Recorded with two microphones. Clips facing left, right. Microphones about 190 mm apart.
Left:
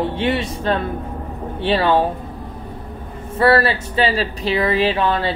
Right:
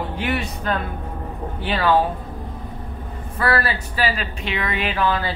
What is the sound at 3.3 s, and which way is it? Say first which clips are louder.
Speech: left 7 dB; 30° left (ahead or behind).